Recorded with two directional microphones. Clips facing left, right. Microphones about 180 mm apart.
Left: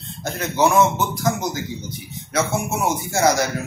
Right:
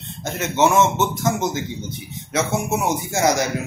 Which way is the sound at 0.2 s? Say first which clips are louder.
Right 1 dB; 20° right (ahead or behind).